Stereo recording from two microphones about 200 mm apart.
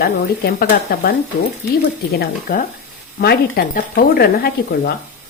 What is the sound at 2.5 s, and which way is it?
Speech, 45° left (ahead or behind).